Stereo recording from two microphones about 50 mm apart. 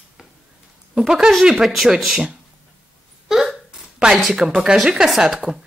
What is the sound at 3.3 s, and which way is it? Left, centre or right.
Hiccup, centre.